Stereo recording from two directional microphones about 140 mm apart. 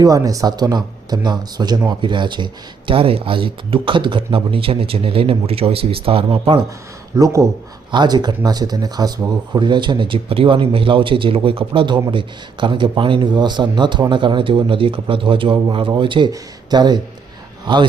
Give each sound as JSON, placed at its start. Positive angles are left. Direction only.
{"t": 0.0, "sound": "speech", "side_deg": -25}
{"t": 7.1, "sound": "speech", "side_deg": -25}